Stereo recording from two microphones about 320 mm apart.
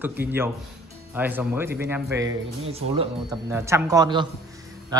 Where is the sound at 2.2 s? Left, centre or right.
Right.